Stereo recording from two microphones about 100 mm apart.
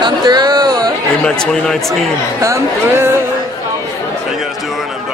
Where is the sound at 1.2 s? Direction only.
5° left (ahead or behind).